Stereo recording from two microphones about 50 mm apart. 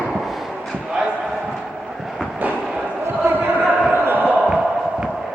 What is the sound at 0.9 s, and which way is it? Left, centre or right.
Basketball bounce, centre.